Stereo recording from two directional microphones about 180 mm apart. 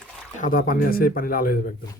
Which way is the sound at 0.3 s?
50° left (ahead or behind).